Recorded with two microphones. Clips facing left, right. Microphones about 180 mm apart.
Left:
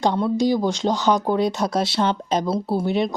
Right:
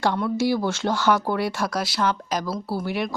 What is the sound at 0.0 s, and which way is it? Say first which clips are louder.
Speech: left 3 dB; 20° left (ahead or behind).